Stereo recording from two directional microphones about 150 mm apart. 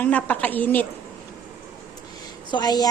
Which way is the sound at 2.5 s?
25° left (ahead or behind).